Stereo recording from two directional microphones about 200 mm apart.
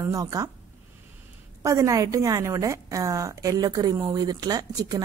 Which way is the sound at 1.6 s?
15° right (ahead or behind).